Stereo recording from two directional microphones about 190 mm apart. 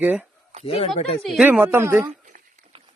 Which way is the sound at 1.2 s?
5° right (ahead or behind).